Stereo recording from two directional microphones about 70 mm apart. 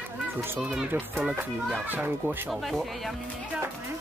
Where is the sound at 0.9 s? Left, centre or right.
Right.